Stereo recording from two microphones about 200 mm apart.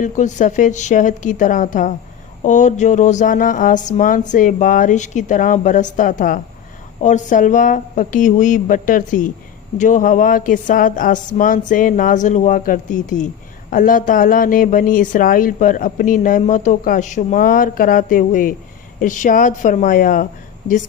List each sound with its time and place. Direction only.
0.0 s speech: 40° left (ahead or behind)